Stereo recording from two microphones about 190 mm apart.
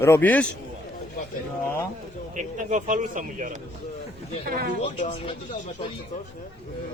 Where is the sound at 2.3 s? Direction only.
40° right (ahead or behind).